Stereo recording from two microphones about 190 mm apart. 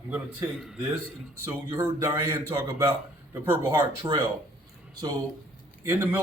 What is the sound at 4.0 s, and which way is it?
Speech, 20° right (ahead or behind).